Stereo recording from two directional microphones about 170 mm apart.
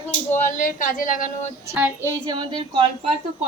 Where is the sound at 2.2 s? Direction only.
25° right (ahead or behind).